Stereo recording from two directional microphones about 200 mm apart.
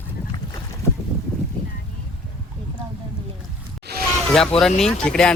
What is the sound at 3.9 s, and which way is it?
Vehicle, 55° right (ahead or behind).